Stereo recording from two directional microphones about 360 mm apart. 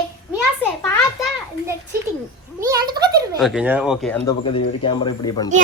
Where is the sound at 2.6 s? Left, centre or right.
Centre.